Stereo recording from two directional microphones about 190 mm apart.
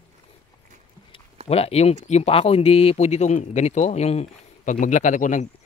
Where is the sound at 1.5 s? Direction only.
30° left (ahead or behind).